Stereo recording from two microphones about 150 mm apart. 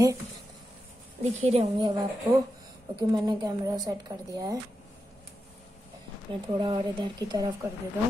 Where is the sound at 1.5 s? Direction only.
35° right (ahead or behind).